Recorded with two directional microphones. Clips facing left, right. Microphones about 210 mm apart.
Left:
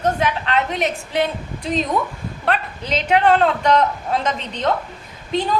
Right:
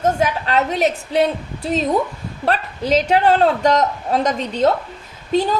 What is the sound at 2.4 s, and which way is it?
A woman's voice, 40° right (ahead or behind).